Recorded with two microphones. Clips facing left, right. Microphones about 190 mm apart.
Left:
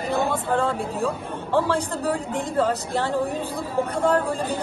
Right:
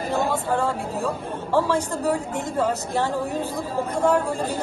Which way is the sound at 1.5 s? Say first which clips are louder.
Right 1 dB; 10° right (ahead or behind).